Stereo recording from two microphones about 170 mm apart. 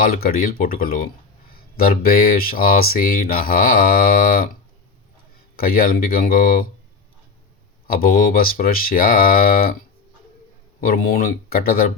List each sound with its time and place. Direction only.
0.0 s speech: 60° left (ahead or behind)
5.5 s speech: 60° left (ahead or behind)
7.9 s speech: 60° left (ahead or behind)
10.8 s speech: 60° left (ahead or behind)